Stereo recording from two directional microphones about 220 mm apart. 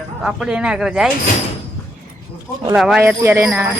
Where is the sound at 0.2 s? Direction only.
5° right (ahead or behind).